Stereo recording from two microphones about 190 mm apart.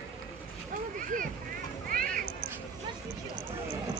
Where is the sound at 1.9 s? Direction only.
50° right (ahead or behind).